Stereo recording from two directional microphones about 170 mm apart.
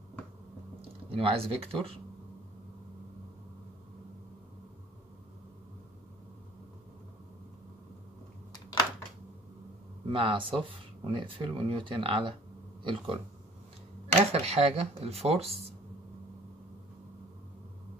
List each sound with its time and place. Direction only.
1.1 s speech: 35° right (ahead or behind)
10.0 s speech: 30° right (ahead or behind)
14.3 s speech: 35° right (ahead or behind)